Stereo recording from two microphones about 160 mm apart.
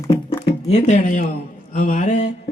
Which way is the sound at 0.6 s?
45° left (ahead or behind).